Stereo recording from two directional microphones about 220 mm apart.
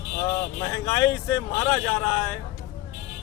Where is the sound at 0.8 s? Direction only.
15° left (ahead or behind).